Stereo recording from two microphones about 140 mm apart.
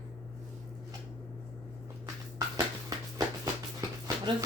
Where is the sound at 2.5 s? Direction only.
30° right (ahead or behind).